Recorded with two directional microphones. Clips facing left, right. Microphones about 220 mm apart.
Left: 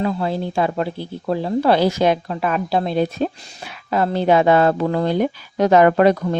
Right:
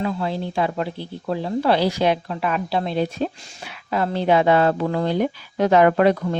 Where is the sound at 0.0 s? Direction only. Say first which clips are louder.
Left 3 dB; 40° left (ahead or behind).